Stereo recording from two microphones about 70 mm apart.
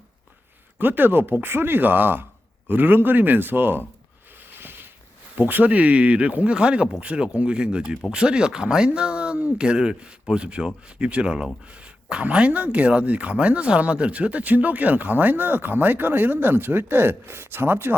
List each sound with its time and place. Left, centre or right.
0.8 s speech: right
4.4 s a sound: right
5.4 s speech: right